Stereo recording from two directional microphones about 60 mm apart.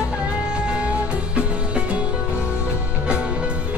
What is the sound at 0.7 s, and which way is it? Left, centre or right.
Music, centre.